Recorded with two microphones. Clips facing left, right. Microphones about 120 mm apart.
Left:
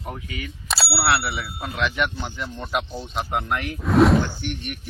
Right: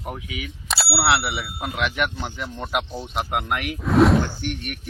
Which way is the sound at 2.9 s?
10° right (ahead or behind).